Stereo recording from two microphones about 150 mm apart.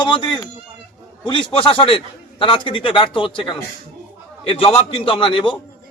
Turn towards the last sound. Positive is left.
turn(degrees=35)  # may be behind; listen again after turning